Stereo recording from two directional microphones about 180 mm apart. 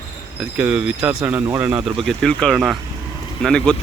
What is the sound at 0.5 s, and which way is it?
A man's voice, 5° right (ahead or behind).